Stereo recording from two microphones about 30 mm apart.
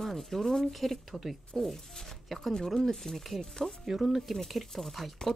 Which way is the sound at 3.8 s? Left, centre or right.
Centre.